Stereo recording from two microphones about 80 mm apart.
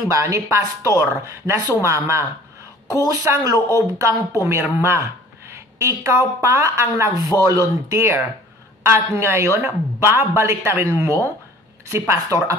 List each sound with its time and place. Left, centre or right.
0.1 s a woman's voice: right
3.5 s a woman's voice: left
4.0 s speech: right